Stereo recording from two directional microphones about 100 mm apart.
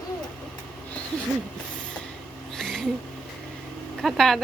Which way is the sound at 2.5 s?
5° left (ahead or behind).